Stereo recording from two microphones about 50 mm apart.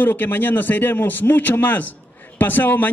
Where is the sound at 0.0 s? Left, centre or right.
Left.